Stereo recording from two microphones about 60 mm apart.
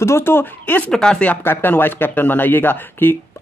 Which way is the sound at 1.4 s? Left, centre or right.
Left.